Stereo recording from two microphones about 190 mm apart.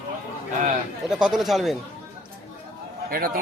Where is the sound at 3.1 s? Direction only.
50° right (ahead or behind).